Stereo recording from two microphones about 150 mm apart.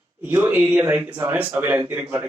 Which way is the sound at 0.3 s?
15° right (ahead or behind).